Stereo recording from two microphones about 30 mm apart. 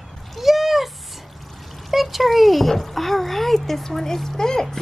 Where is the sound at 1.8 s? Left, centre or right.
Centre.